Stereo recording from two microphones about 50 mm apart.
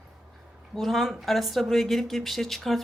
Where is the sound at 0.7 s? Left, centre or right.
Centre.